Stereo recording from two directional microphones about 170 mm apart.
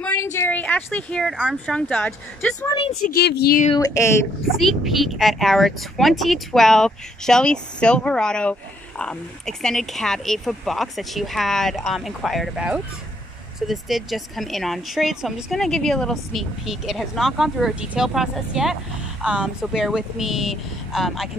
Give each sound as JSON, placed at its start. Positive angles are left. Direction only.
{"t": 0.0, "sound": "a sound", "side_deg": 10}
{"t": 0.8, "sound": "speech", "side_deg": 5}
{"t": 2.6, "sound": "speech", "side_deg": 25}
{"t": 3.2, "sound": "speech", "side_deg": 70}
{"t": 3.7, "sound": "speech", "side_deg": 20}
{"t": 4.6, "sound": "speech", "side_deg": 0}